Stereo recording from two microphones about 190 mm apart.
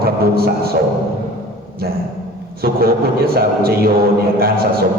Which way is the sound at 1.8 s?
55° right (ahead or behind).